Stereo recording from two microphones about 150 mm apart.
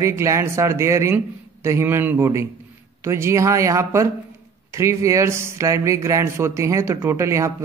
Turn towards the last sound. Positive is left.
turn(degrees=-20)  # may be behind; listen again after turning